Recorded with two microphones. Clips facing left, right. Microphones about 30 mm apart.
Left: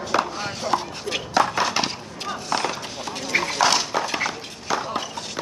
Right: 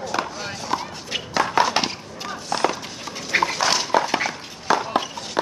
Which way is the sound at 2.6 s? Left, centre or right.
Centre.